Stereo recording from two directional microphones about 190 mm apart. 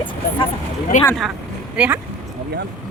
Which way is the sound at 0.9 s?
40° left (ahead or behind).